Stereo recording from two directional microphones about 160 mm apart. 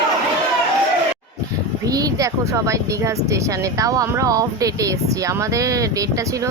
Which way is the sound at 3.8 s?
20° right (ahead or behind).